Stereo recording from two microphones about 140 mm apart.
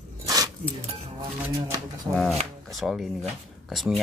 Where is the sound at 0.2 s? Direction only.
25° right (ahead or behind).